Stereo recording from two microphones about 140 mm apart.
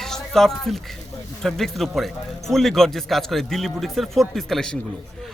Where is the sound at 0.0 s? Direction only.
5° left (ahead or behind).